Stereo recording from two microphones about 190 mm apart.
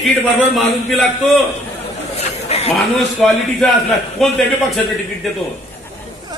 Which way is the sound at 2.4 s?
35° left (ahead or behind).